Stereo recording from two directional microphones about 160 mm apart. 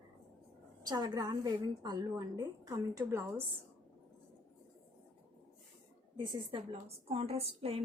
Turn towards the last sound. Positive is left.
turn(degrees=-40)  # may be behind; listen again after turning